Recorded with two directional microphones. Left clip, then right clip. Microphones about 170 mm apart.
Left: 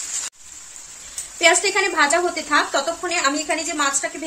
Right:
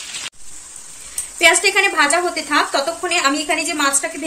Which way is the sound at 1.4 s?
20° left (ahead or behind).